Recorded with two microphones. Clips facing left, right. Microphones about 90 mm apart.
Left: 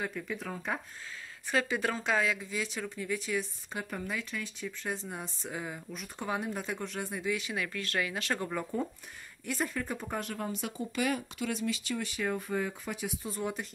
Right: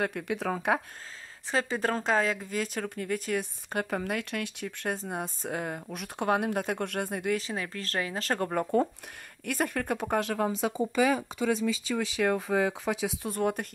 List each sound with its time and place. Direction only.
0.0 s speech: 75° right (ahead or behind)
1.5 s speech: 35° right (ahead or behind); by 3.8 s 55° right (ahead or behind)
3.9 s speech: 80° right; by 4.9 s 65° right (ahead or behind)
4.9 s speech: 45° right (ahead or behind)
7.3 s speech: 35° right (ahead or behind)
8.4 s speech: 50° right (ahead or behind)
9.5 s speech: 60° right (ahead or behind); by 10.9 s 85° right
12.1 s speech: 90° right; by 13.7 s 55° right (ahead or behind)